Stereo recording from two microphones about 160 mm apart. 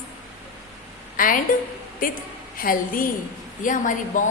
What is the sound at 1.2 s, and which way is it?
Speech, 55° left (ahead or behind).